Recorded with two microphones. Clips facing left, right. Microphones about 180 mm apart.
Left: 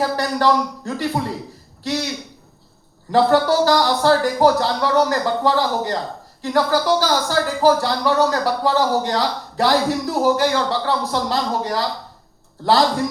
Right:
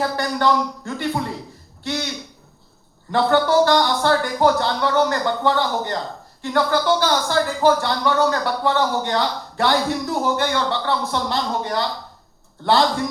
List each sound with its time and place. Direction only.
0.0 s speech: 35° left (ahead or behind)
3.1 s speech: 35° left (ahead or behind)